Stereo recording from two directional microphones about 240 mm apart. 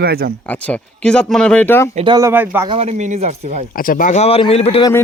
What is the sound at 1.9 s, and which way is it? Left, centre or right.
Speech, centre.